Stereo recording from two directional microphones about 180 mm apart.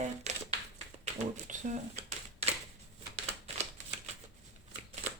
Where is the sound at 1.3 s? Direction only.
40° right (ahead or behind).